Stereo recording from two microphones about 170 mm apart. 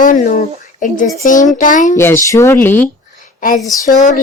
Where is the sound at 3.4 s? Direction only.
55° left (ahead or behind).